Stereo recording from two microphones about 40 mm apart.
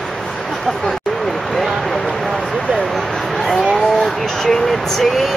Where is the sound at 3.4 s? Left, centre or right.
Centre.